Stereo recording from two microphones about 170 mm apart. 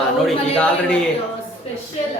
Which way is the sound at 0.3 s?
5° left (ahead or behind).